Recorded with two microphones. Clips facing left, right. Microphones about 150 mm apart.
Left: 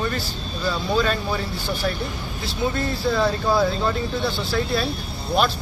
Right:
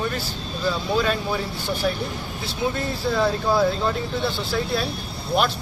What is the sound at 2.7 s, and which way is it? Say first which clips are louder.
Speech: left 3 dB; centre (ahead or behind).